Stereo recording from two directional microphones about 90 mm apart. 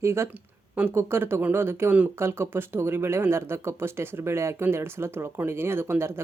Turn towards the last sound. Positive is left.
turn(degrees=-30)  # may be behind; listen again after turning